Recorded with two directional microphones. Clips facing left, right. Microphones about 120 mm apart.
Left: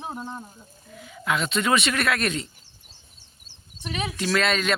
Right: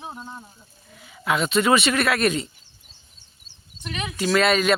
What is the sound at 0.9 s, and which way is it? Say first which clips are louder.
Speech: right 3 dB; 5° right (ahead or behind).